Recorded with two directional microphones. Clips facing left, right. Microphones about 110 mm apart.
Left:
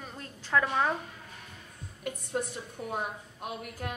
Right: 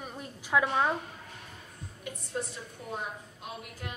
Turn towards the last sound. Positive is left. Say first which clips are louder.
# left 4 dB
turn(degrees=50)  # may be behind; listen again after turning